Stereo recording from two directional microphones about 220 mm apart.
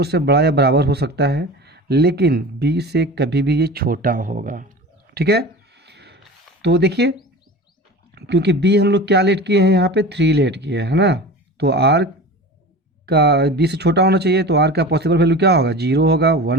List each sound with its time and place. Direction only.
0.0 s speech: 50° right (ahead or behind)
5.1 s a sound: 45° right (ahead or behind)
6.6 s speech: 50° right (ahead or behind)
13.1 s speech: 45° right (ahead or behind)